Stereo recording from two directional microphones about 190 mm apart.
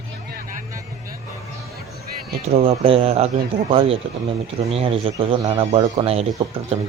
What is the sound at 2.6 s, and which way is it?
A man's voice, 30° right (ahead or behind).